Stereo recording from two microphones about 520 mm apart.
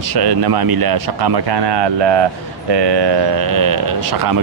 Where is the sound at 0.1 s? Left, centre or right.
Right.